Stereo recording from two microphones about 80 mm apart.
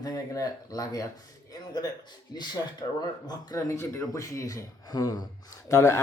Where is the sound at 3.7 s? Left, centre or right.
Left.